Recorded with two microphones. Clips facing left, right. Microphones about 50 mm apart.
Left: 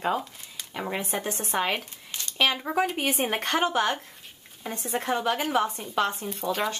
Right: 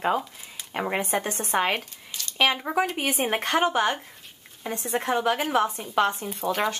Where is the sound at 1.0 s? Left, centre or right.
Right.